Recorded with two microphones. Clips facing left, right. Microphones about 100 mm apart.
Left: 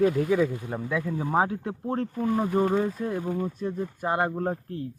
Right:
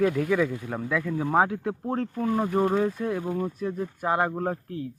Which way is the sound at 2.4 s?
5° right (ahead or behind).